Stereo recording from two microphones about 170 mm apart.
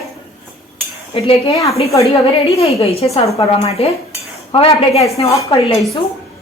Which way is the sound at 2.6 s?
35° left (ahead or behind).